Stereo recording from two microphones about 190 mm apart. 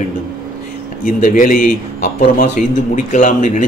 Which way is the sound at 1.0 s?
45° left (ahead or behind).